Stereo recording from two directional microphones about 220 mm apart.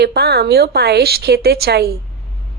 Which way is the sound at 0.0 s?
45° right (ahead or behind).